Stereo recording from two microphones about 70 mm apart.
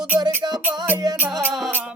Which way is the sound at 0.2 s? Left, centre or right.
Right.